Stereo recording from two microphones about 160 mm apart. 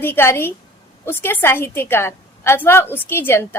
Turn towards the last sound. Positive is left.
turn(degrees=15)  # may be behind; listen again after turning